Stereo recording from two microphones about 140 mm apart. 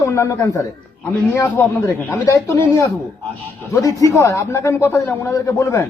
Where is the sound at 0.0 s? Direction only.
20° left (ahead or behind).